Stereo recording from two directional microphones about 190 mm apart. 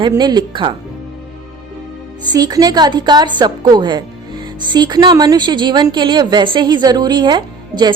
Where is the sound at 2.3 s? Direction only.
20° right (ahead or behind).